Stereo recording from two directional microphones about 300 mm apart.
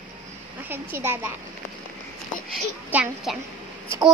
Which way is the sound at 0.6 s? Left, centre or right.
Centre.